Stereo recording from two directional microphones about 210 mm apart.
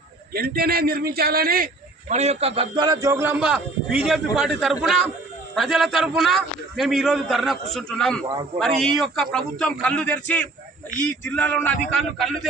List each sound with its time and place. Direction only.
0.3 s a man's voice: 45° right (ahead or behind); by 10.5 s 5° left (ahead or behind)
11.3 s a sound: 10° left (ahead or behind)
12.1 s a man's voice: centre (ahead or behind)